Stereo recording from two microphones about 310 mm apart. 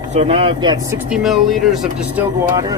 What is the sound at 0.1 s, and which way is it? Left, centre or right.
Speech, centre.